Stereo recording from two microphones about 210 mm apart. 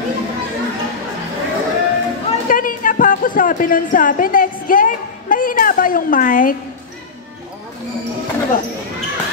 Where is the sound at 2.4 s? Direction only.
40° left (ahead or behind).